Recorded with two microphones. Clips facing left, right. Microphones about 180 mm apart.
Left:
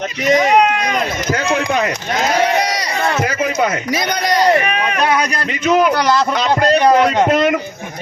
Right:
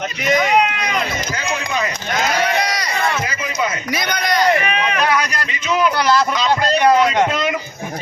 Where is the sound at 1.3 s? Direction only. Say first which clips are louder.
Left 6 dB; 60° left (ahead or behind).